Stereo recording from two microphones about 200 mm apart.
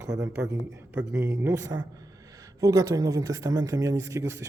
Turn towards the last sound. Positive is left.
turn(degrees=-15)  # may be behind; listen again after turning